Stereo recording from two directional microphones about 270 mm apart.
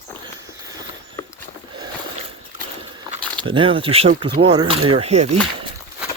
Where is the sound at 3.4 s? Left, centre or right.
Centre.